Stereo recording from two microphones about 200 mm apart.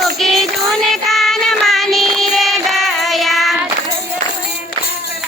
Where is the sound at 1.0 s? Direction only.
Centre (ahead or behind).